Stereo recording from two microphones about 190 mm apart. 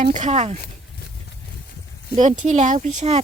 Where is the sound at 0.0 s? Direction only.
40° right (ahead or behind).